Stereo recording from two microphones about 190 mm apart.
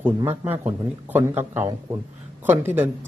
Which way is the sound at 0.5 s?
10° right (ahead or behind).